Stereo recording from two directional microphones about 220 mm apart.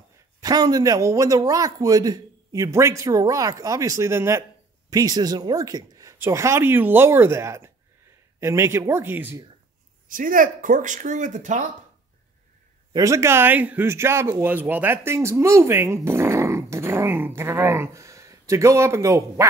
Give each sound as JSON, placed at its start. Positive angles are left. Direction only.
{"t": 0.4, "sound": "a man's voice", "side_deg": -15}
{"t": 10.0, "sound": "speech", "side_deg": -40}
{"t": 12.9, "sound": "a man's voice", "side_deg": -15}